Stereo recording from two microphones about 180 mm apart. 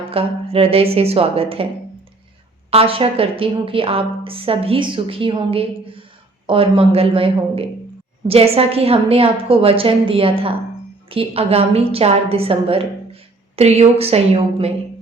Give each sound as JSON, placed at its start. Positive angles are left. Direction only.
{"t": 0.0, "sound": "a woman's voice", "side_deg": -30}
{"t": 2.6, "sound": "a woman's voice", "side_deg": -30}